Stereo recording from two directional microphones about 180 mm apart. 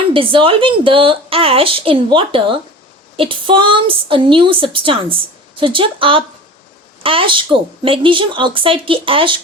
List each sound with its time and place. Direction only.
0.1 s a woman's voice: 30° right (ahead or behind)